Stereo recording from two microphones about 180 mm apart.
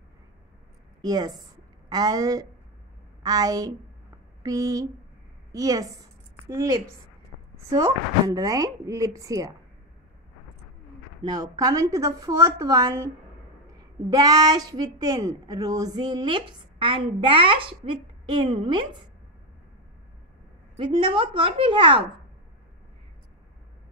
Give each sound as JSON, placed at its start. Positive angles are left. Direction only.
{"t": 1.0, "sound": "a woman's voice", "side_deg": -20}
{"t": 8.4, "sound": "a woman's voice", "side_deg": -20}
{"t": 11.2, "sound": "a woman's voice", "side_deg": -20}
{"t": 20.7, "sound": "a woman's voice", "side_deg": -25}